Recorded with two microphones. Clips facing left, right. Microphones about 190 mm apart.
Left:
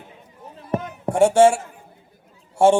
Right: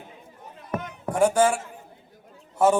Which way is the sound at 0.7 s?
25° left (ahead or behind).